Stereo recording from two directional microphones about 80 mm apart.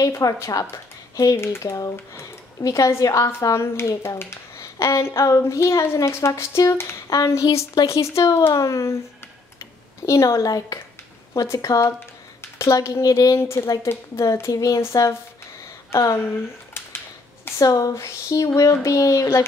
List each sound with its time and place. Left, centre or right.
0.1 s speech: left
1.3 s a woman's voice: left
1.6 s speech: left
3.5 s a woman's voice: left
10.0 s a woman's voice: left
14.5 s speech: left
14.8 s a woman's voice: left
17.6 s speech: left